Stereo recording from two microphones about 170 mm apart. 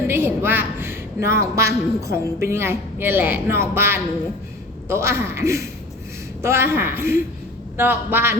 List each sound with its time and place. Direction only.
0.1 s a woman's voice: 15° right (ahead or behind)